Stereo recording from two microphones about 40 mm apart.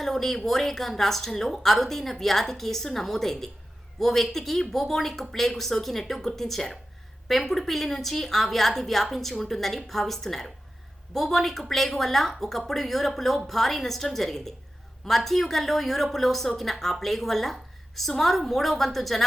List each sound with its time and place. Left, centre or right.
0.0 s a woman's voice: centre